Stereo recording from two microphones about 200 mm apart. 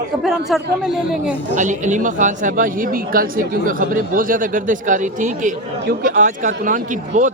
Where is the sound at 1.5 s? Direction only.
40° right (ahead or behind).